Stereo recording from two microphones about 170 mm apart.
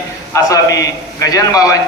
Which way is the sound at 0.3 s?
20° left (ahead or behind).